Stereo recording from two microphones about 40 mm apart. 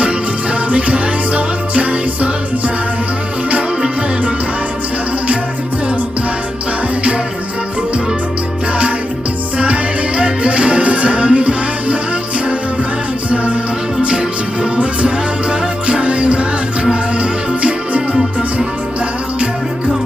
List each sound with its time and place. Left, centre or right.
0.7 s music: right
9.6 s music: right
13.3 s music: right
14.8 s music: right
18.1 s music: centre